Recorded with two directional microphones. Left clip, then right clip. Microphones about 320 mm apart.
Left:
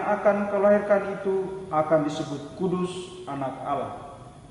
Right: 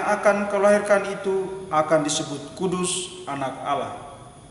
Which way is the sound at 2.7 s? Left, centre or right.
Centre.